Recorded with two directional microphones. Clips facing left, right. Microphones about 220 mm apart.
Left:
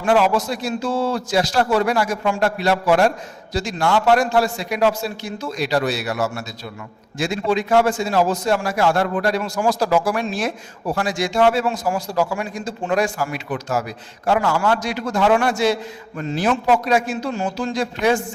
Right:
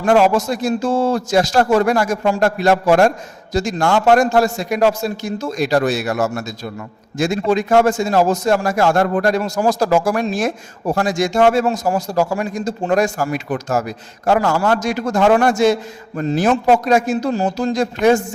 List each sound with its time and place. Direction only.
0.0 s a man's voice: 45° right (ahead or behind)